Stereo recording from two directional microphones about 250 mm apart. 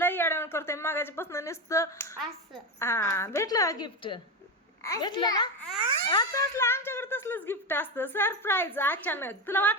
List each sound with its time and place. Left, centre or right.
0.0 s a woman's voice: centre